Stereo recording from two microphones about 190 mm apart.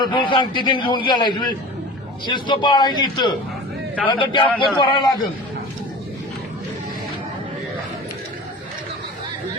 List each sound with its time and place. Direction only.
0.0 s a man's voice: 25° left (ahead or behind)
4.4 s a man's voice: 5° left (ahead or behind)
4.8 s a man's voice: 25° left (ahead or behind)